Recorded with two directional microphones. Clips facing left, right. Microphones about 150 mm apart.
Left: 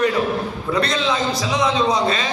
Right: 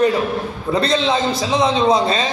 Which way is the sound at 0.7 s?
30° right (ahead or behind).